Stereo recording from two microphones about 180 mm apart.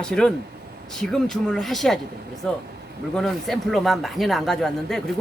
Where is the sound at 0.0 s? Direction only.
5° left (ahead or behind).